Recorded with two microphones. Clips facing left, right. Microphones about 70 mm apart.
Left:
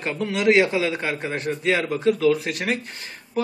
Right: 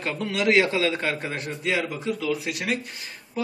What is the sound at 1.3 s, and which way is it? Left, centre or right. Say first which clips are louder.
Speech: left 4 dB; left.